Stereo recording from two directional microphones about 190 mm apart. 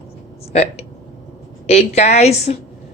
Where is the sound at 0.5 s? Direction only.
35° left (ahead or behind).